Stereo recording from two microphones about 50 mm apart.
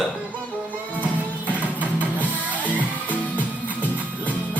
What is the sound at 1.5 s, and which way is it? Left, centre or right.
Music, right.